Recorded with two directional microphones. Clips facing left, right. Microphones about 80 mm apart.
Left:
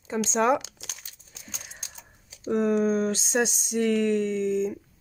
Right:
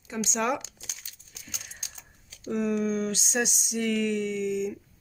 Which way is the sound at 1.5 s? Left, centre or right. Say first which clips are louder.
Left 1 dB; left.